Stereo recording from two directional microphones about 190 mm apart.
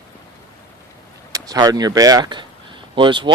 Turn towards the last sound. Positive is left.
turn(degrees=-25)  # may be behind; listen again after turning